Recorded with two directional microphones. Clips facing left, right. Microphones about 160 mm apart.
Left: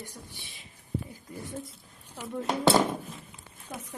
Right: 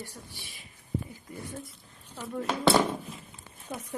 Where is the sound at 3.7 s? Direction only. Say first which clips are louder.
Right 2 dB; 5° right (ahead or behind).